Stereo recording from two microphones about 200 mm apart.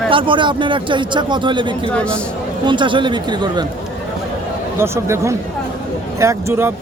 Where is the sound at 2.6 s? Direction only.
25° right (ahead or behind).